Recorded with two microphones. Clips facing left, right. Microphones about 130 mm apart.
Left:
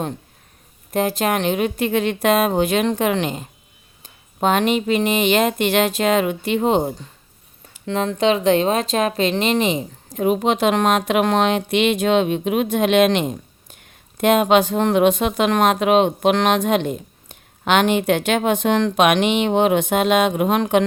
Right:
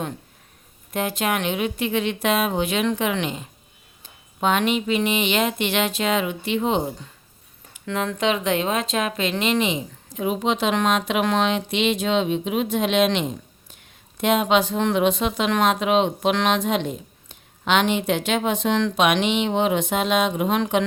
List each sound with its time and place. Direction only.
0.9 s speech: 40° left (ahead or behind)
7.9 s speech: 30° left (ahead or behind); by 20.8 s 55° left (ahead or behind)